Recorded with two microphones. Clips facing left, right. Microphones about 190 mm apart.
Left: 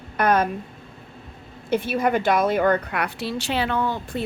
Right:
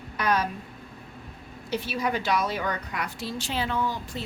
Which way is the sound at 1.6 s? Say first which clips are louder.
Left 7 dB; 55° left (ahead or behind).